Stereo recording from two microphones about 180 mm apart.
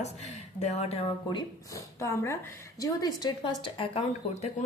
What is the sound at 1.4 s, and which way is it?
A woman's voice, 15° left (ahead or behind).